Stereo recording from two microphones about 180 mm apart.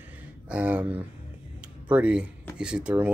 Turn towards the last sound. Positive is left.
turn(degrees=-5)  # may be behind; listen again after turning